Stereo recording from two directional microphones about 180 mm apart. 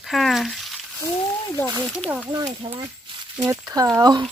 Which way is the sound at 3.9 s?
25° right (ahead or behind).